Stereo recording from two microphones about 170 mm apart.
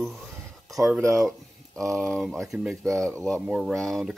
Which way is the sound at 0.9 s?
20° right (ahead or behind).